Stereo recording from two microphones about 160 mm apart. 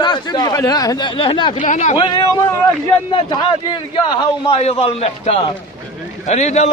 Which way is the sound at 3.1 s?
30° left (ahead or behind).